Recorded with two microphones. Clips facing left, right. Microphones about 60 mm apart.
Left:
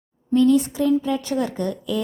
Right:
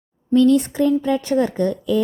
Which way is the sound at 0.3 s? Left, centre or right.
Right.